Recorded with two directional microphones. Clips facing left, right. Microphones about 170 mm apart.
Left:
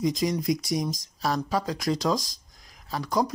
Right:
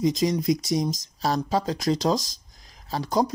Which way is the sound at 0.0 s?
20° right (ahead or behind).